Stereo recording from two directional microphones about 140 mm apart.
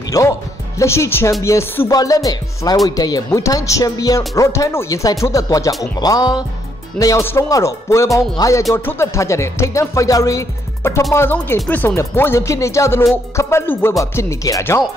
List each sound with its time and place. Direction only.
0.2 s speech: 20° left (ahead or behind)
11.1 s music: 15° left (ahead or behind)
11.6 s speech: 10° left (ahead or behind)